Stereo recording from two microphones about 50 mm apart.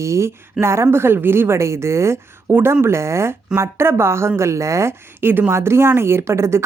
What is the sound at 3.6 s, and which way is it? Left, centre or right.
Speech, right.